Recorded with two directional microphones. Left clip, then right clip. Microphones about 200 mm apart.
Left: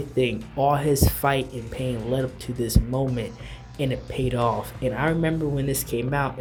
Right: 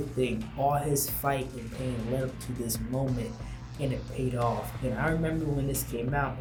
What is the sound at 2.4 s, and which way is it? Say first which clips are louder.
Speech: left 7 dB; 45° left (ahead or behind).